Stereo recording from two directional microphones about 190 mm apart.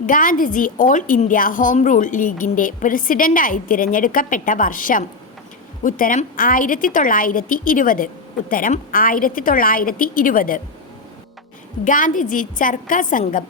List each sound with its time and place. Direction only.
0.0 s a woman's voice: 45° left (ahead or behind)
11.9 s a woman's voice: 45° left (ahead or behind)